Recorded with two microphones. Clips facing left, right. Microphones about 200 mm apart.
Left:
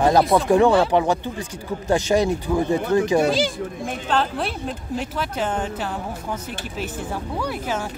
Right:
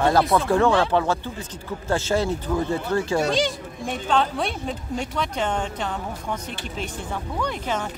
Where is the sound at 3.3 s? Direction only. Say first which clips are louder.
Left 2 dB; 5° left (ahead or behind).